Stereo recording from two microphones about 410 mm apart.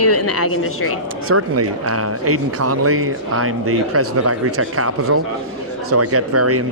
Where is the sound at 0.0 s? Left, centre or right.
Left.